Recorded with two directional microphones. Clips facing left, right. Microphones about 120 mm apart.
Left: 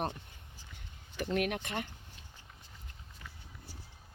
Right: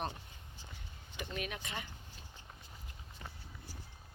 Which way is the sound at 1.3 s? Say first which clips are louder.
Left 9 dB; 65° left (ahead or behind).